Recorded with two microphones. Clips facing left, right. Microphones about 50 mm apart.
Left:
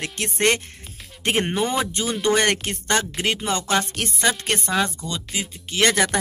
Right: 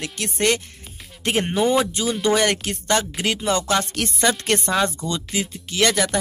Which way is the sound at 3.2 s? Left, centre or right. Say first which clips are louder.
Right 2 dB; left.